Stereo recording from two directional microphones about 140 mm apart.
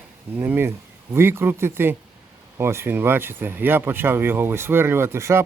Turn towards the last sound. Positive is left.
turn(degrees=-20)  # may be behind; listen again after turning